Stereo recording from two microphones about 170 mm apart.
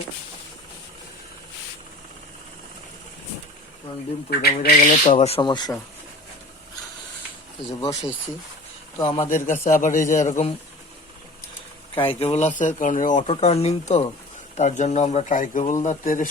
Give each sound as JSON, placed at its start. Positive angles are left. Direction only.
{"t": 4.3, "sound": "bird", "side_deg": 65}
{"t": 4.9, "sound": "speech", "side_deg": 45}
{"t": 9.0, "sound": "speech", "side_deg": 30}
{"t": 11.9, "sound": "speech", "side_deg": 35}